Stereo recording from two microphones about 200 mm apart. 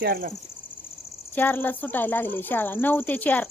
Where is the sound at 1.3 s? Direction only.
10° left (ahead or behind).